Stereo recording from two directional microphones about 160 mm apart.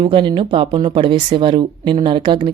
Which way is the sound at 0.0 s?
30° right (ahead or behind).